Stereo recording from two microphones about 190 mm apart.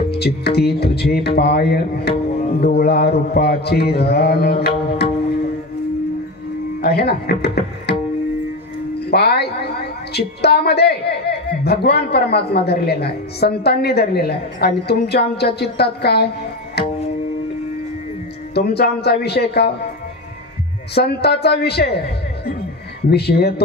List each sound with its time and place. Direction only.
0.1 s a woman's voice: 60° left (ahead or behind)
6.8 s a woman's voice: 60° left (ahead or behind)
9.1 s a woman's voice: 60° left (ahead or behind)
18.5 s a woman's voice: 60° left (ahead or behind)
20.9 s a woman's voice: 60° left (ahead or behind)
23.0 s a woman's voice: 60° left (ahead or behind)